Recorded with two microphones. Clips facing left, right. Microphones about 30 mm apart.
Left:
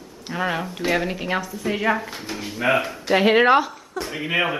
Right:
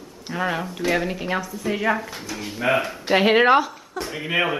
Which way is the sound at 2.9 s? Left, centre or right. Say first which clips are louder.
Even; centre.